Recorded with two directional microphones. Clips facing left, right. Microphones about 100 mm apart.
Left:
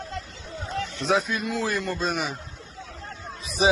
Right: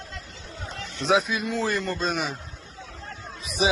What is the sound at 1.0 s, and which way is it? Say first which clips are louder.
A man's voice: right 2 dB; centre (ahead or behind).